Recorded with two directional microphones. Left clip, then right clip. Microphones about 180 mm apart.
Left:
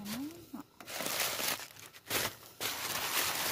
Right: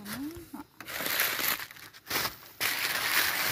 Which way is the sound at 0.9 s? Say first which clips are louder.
Right 5 dB; 5° right (ahead or behind).